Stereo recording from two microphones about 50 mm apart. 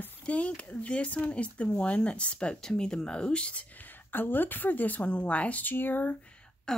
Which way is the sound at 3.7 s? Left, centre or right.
Left.